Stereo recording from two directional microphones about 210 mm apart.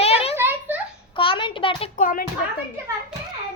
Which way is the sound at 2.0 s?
40° left (ahead or behind).